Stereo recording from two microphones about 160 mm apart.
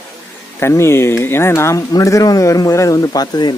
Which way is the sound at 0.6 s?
15° left (ahead or behind).